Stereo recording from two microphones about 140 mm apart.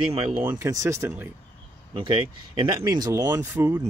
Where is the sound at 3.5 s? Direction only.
15° right (ahead or behind).